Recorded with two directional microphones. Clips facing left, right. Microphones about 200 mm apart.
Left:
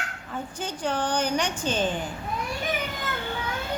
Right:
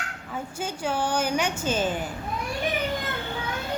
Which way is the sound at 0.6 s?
10° right (ahead or behind).